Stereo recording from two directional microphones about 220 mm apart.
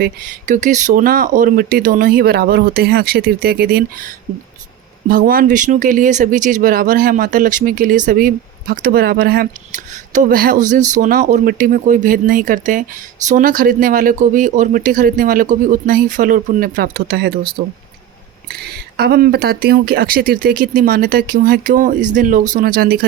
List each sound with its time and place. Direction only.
0.0 s speech: 35° right (ahead or behind)